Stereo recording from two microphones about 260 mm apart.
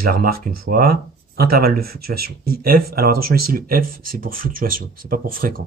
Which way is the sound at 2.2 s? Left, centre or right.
Right.